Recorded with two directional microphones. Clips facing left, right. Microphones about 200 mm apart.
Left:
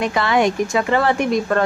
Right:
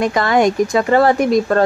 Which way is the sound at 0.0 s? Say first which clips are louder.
Right 3 dB; 40° right (ahead or behind).